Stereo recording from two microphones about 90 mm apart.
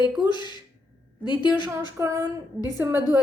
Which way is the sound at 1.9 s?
35° right (ahead or behind).